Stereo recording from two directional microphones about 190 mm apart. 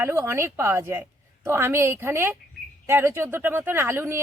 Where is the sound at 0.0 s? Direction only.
15° right (ahead or behind).